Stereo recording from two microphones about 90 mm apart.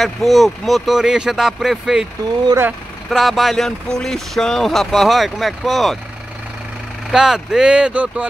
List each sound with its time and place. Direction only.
0.0 s speech: centre (ahead or behind)
3.1 s speech: centre (ahead or behind)
7.1 s speech: 5° right (ahead or behind)